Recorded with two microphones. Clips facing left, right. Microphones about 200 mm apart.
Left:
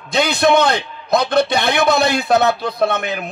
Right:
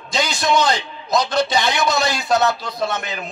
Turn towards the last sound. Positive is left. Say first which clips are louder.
# left 6 dB
turn(degrees=60)  # may be behind; listen again after turning